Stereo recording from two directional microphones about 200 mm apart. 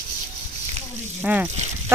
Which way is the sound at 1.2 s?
5° right (ahead or behind).